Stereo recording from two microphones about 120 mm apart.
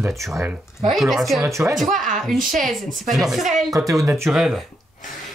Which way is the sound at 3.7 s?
30° right (ahead or behind).